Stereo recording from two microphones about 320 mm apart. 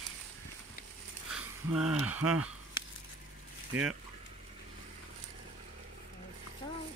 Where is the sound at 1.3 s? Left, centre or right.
Centre.